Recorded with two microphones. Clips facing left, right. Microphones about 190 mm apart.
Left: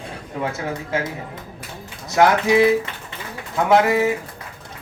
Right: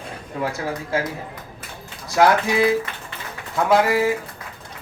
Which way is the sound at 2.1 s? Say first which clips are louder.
Left 2 dB; 20° left (ahead or behind).